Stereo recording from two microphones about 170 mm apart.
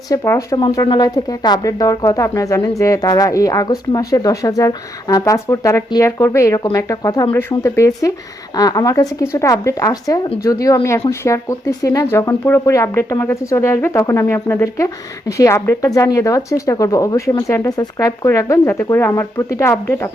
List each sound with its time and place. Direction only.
0.1 s speech: 20° left (ahead or behind)